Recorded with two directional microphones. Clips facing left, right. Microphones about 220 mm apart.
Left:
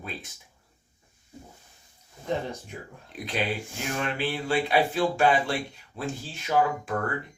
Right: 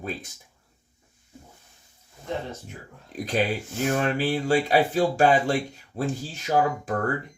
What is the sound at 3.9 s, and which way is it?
Speech, 45° right (ahead or behind).